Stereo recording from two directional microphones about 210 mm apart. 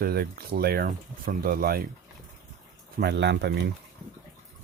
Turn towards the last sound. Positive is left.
turn(degrees=-55)  # may be behind; listen again after turning